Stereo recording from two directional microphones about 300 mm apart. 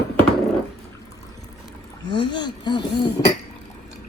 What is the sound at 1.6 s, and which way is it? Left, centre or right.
Speech, centre.